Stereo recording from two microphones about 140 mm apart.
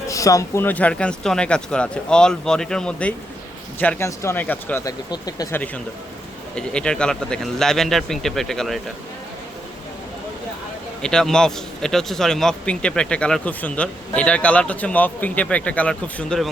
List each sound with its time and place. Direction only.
0.1 s speech: 25° left (ahead or behind)
5.5 s speech: 15° left (ahead or behind)
11.0 s speech: 5° left (ahead or behind)